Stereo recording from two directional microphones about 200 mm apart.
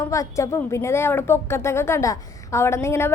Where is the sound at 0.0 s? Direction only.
15° left (ahead or behind).